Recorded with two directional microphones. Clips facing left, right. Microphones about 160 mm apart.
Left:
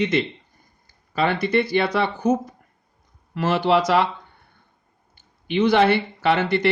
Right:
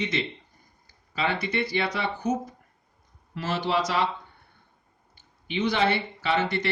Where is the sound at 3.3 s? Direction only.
65° left (ahead or behind).